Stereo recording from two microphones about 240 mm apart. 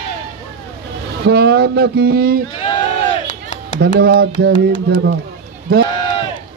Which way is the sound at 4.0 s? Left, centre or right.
Right.